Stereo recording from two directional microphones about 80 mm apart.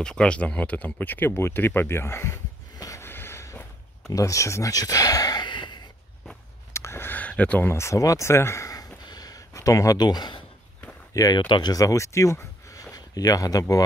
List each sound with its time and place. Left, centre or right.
0.0 s speech: centre; by 2.4 s left
3.0 s a sound: left
4.1 s speech: left
6.7 s a sound: left; by 7.6 s centre
7.6 s speech: left
9.0 s a sound: left
11.3 s speech: left
11.7 s speech: left
12.9 s speech: left